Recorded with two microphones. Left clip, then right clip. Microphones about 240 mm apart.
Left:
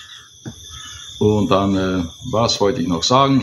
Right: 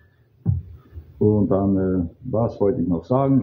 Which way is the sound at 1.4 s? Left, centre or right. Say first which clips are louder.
Left 4 dB; centre.